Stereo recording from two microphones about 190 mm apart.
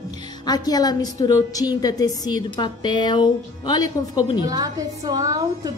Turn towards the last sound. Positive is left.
turn(degrees=-20)  # may be behind; listen again after turning